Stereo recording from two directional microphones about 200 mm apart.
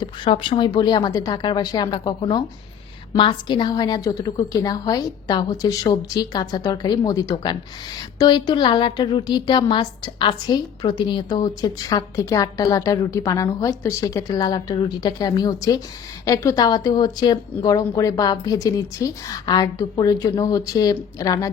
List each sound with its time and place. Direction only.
0.0 s a woman's voice: 25° left (ahead or behind)